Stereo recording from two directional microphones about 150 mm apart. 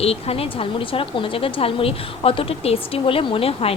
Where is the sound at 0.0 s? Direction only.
40° left (ahead or behind).